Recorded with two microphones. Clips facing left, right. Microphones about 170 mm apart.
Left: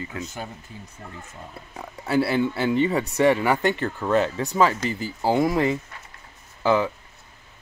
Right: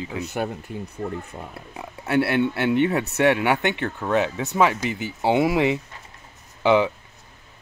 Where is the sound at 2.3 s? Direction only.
65° right (ahead or behind).